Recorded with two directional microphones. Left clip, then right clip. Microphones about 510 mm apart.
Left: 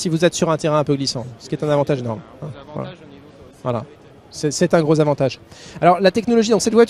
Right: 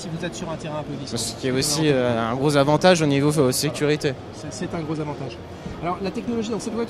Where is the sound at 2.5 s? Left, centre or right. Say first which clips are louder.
Right 16 dB; right.